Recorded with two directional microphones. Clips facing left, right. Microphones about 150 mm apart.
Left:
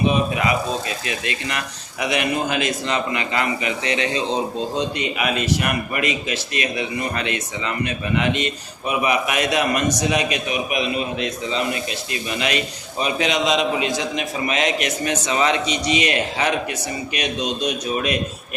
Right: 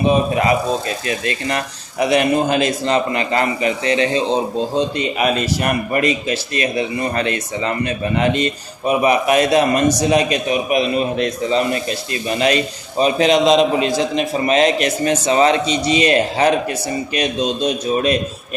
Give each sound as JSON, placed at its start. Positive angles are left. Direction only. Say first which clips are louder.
{"t": 0.0, "sound": "a man's voice", "louder": "right 4 dB", "side_deg": -35}